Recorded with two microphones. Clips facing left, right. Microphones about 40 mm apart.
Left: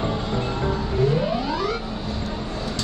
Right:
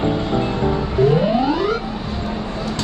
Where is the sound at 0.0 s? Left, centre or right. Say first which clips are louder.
Right 6 dB; right.